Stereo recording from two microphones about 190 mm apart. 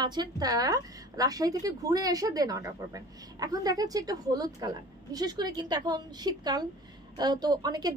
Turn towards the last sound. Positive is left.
turn(degrees=-20)  # may be behind; listen again after turning